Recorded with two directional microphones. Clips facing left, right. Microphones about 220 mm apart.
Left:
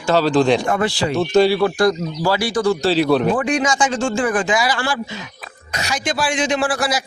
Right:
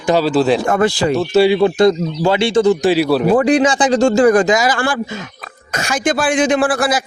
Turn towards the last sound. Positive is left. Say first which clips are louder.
# right 5 dB
turn(degrees=-55)  # may be behind; listen again after turning